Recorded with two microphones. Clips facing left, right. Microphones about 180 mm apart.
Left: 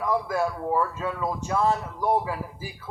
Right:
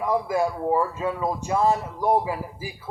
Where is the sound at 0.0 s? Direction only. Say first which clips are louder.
Right 2 dB; 15° right (ahead or behind).